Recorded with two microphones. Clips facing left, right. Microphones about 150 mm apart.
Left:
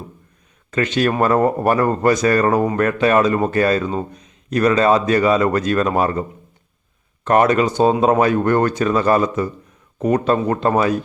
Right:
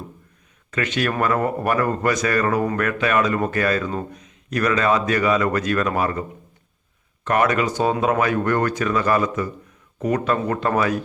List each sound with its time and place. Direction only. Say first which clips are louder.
0.7 s a man's voice: left 5 dB; 30° left (ahead or behind)
7.3 s a man's voice: left 5 dB; 30° left (ahead or behind)